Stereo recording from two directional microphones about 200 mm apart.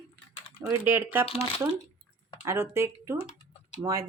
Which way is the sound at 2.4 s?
10° right (ahead or behind).